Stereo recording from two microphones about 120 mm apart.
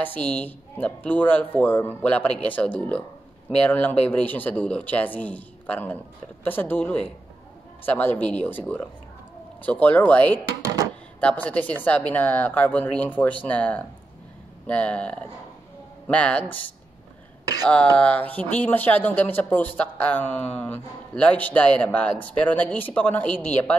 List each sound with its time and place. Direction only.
0.0 s speech: 15° left (ahead or behind)
17.9 s speech: 10° left (ahead or behind)